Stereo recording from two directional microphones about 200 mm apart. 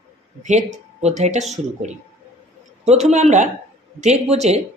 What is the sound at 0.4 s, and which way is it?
Speech, 35° right (ahead or behind).